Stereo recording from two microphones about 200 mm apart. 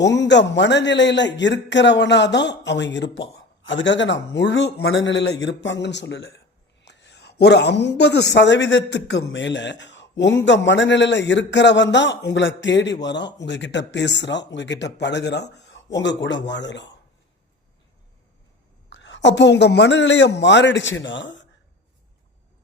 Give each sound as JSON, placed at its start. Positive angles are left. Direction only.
{"t": 0.0, "sound": "a man's voice", "side_deg": 60}
{"t": 18.9, "sound": "a man's voice", "side_deg": 65}